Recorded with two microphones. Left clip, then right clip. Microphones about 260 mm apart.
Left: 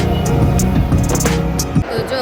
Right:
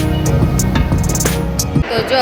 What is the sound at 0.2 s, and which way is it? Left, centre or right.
Music, centre.